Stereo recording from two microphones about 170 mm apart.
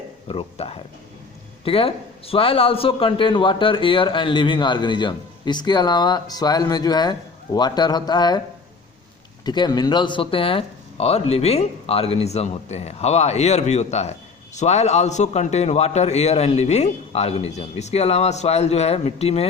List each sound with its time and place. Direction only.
0.3 s a man's voice: 35° left (ahead or behind)
9.4 s speech: 25° left (ahead or behind)